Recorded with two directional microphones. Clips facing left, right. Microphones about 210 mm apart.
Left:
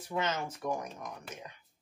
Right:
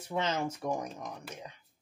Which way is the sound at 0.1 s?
30° right (ahead or behind).